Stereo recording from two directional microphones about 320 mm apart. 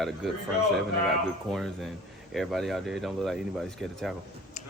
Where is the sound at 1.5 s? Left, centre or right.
Centre.